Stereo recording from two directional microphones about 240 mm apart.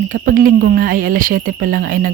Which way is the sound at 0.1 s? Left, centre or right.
Right.